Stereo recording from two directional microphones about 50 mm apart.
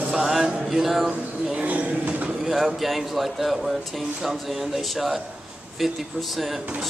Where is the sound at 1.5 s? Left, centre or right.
Right.